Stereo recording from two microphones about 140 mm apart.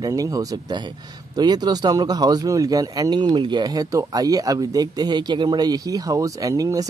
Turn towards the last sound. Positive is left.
turn(degrees=-25)  # may be behind; listen again after turning